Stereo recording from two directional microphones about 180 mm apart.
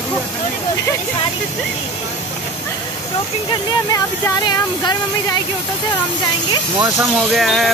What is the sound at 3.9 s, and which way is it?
Speech, 20° left (ahead or behind).